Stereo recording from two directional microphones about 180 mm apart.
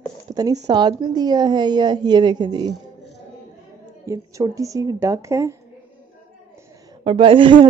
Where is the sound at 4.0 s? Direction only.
20° right (ahead or behind).